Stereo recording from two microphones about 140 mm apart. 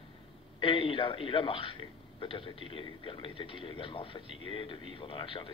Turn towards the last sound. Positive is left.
turn(degrees=40)  # may be behind; listen again after turning